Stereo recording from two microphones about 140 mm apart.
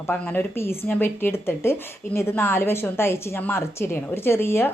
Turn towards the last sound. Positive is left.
turn(degrees=20)  # may be behind; listen again after turning